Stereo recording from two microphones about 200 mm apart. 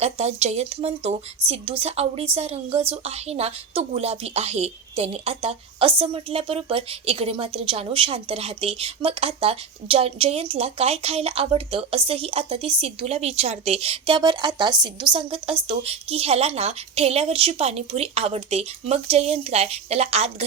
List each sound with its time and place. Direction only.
0.0 s a woman's voice: 30° right (ahead or behind)